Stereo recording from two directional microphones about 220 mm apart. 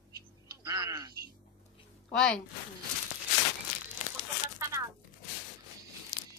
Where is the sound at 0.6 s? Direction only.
15° right (ahead or behind).